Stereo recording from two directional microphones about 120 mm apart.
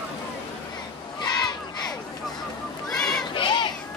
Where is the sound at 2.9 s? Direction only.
5° left (ahead or behind).